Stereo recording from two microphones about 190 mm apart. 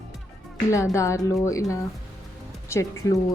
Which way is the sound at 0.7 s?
15° left (ahead or behind).